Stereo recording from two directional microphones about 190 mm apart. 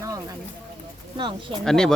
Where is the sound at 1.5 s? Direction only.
5° left (ahead or behind).